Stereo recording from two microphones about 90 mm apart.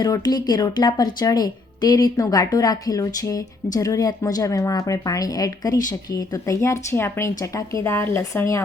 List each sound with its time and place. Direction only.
0.0 s speech: 45° left (ahead or behind); by 8.6 s 30° left (ahead or behind)